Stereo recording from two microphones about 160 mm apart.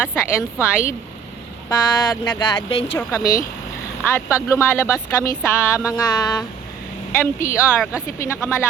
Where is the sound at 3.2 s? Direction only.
65° left (ahead or behind).